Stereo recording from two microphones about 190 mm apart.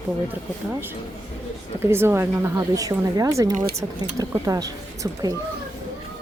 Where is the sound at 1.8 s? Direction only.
10° right (ahead or behind).